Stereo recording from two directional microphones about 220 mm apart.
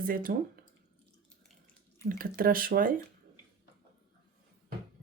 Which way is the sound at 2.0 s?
40° right (ahead or behind).